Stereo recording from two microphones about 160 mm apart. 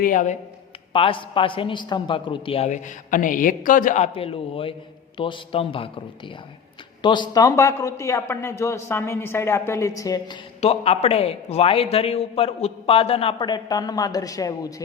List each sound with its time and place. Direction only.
0.0 s a man's voice: 55° left (ahead or behind)
0.9 s a man's voice: 35° left (ahead or behind)
10.6 s a man's voice: 40° left (ahead or behind); by 14.7 s 20° left (ahead or behind)